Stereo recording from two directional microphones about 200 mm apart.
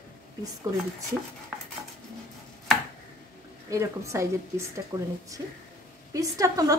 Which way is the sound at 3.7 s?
15° right (ahead or behind).